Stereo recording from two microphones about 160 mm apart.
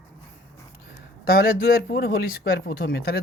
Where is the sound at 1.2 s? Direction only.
70° left (ahead or behind).